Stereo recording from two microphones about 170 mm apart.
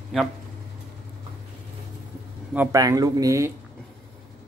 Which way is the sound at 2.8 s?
20° right (ahead or behind).